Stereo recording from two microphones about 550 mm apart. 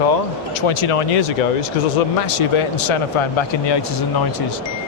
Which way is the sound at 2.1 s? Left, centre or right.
Left.